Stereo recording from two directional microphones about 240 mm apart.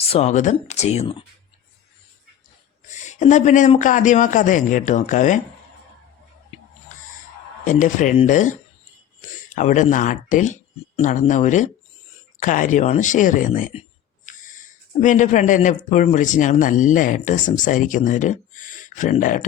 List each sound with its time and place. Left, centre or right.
0.0 s speech: left
2.8 s a man's voice: left
7.6 s a man's voice: left
9.6 s a man's voice: left